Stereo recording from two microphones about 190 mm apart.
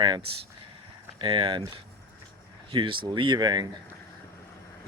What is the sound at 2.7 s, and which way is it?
Speech, 25° right (ahead or behind).